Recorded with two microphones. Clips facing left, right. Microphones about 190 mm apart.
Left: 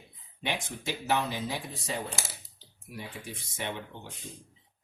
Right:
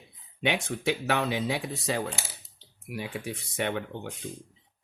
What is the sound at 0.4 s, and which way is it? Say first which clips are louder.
Speech: right 7 dB; 75° right (ahead or behind).